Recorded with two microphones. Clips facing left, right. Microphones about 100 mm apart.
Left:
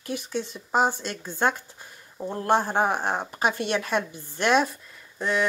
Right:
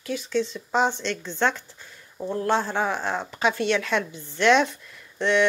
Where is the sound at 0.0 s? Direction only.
55° left (ahead or behind).